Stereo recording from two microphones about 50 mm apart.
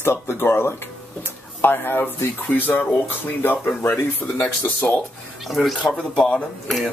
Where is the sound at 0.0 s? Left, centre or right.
Left.